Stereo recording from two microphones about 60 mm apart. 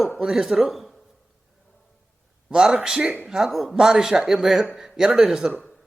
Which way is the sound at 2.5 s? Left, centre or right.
Centre.